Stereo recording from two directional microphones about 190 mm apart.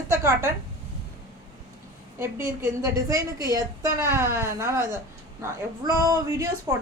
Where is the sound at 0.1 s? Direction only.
15° right (ahead or behind).